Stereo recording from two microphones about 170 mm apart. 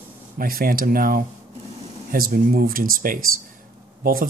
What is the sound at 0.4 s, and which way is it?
Speech, 60° right (ahead or behind).